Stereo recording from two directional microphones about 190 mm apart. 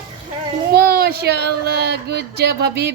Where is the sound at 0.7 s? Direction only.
55° right (ahead or behind).